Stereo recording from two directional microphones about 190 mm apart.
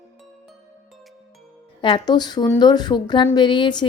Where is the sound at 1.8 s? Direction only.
25° left (ahead or behind).